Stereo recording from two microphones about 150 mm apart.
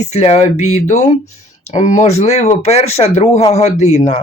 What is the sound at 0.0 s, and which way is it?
Speech, 45° left (ahead or behind).